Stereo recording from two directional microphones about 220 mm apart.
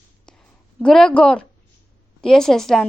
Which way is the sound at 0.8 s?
5° left (ahead or behind).